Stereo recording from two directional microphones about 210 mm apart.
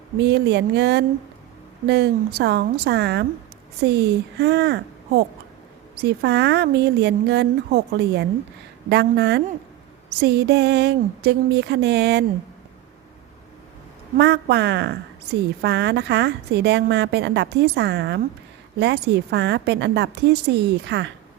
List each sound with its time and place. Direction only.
0.2 s a woman's voice: 55° right (ahead or behind)
14.2 s a woman's voice: 55° right (ahead or behind)